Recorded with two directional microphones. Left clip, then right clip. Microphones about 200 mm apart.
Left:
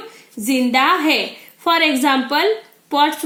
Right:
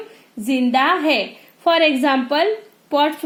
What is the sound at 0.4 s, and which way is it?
A woman's voice, 40° right (ahead or behind).